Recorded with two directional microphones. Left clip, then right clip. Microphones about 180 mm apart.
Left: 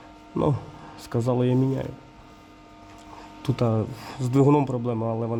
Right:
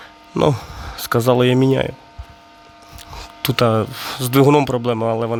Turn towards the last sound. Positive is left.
turn(degrees=-20)  # may be behind; listen again after turning